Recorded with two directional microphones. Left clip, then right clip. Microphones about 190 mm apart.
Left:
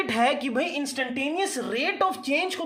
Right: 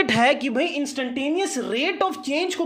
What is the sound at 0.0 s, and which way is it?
A woman's voice, 30° right (ahead or behind).